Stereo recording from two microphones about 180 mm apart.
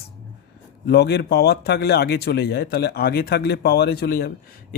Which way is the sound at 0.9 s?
65° left (ahead or behind).